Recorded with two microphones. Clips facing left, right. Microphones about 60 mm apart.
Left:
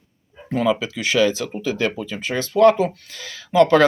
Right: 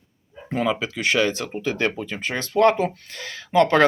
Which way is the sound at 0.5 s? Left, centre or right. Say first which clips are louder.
Left 3 dB; right.